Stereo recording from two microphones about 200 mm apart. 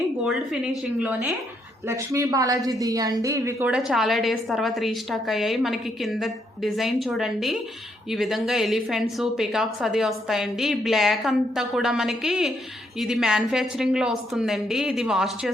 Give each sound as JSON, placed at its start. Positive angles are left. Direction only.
{"t": 0.9, "sound": "a woman's voice", "side_deg": -5}